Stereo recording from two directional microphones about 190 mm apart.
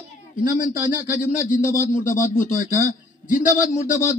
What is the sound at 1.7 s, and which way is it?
A man's voice, 45° left (ahead or behind).